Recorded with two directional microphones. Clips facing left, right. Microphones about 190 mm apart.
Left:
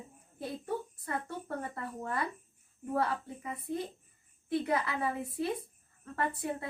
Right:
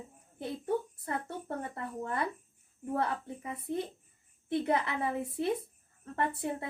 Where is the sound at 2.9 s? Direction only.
25° right (ahead or behind).